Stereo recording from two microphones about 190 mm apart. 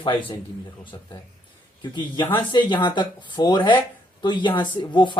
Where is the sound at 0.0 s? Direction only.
25° left (ahead or behind).